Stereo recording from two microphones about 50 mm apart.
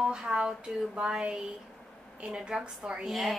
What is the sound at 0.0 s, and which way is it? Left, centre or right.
A woman's voice, centre.